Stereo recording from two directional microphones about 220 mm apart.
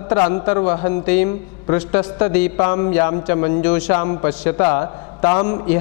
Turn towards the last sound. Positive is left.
turn(degrees=15)  # may be behind; listen again after turning